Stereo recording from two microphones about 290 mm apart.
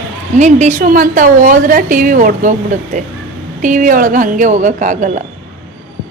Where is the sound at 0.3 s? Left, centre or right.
Right.